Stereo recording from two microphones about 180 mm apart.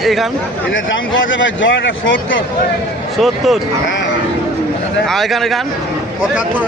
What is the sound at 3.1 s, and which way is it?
Speech, centre (ahead or behind).